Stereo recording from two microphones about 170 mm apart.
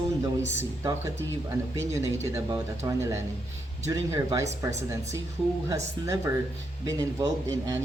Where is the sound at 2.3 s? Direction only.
20° right (ahead or behind).